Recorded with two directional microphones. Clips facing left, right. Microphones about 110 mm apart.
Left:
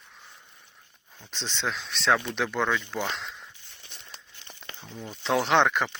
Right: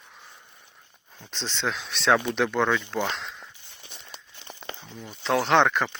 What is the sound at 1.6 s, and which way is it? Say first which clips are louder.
Speech: right 2 dB; 5° right (ahead or behind).